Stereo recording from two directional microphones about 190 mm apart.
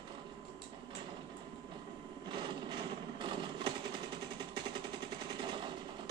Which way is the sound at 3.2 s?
25° right (ahead or behind).